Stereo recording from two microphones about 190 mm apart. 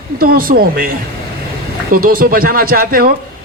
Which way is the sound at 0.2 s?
50° right (ahead or behind).